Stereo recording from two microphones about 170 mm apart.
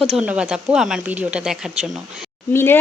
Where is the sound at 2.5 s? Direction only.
15° left (ahead or behind).